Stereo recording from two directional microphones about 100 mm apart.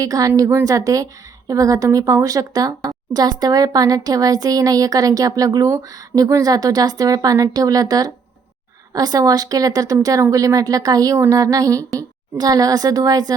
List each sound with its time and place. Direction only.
0.0 s a woman's voice: 35° right (ahead or behind)